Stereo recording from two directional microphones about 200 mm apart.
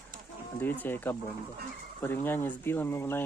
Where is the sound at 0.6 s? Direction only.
10° left (ahead or behind).